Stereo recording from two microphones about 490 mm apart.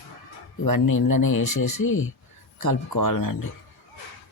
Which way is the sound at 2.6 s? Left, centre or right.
Left.